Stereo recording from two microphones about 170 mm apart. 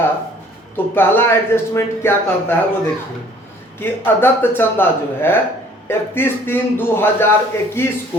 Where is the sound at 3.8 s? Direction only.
15° left (ahead or behind).